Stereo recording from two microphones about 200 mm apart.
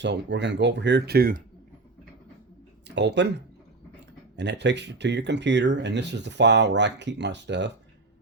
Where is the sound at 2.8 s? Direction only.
60° right (ahead or behind).